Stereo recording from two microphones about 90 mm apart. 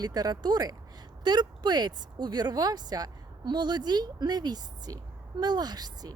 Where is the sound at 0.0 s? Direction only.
45° right (ahead or behind).